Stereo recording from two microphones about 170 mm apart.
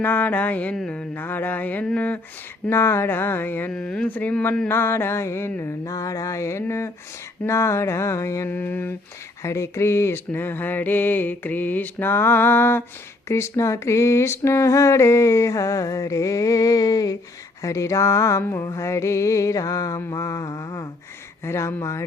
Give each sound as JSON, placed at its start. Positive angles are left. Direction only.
{"t": 0.0, "sound": "speech", "side_deg": 10}
{"t": 17.6, "sound": "mantra", "side_deg": 20}
{"t": 21.4, "sound": "speech", "side_deg": 15}